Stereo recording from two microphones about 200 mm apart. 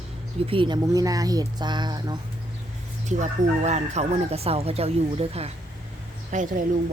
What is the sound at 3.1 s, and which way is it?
Speech, 35° right (ahead or behind).